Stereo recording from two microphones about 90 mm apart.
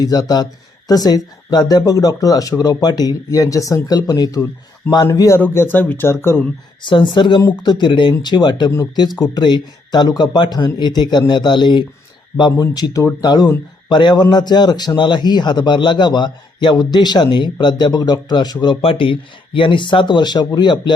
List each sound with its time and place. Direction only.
0.0 s a man's voice: 45° left (ahead or behind)
5.4 s speech: 20° left (ahead or behind)
6.8 s a man's voice: 60° left (ahead or behind)
18.8 s speech: 85° left
19.5 s a man's voice: 65° left (ahead or behind)